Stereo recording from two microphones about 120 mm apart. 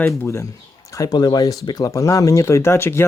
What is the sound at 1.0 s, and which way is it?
Speech, 35° left (ahead or behind).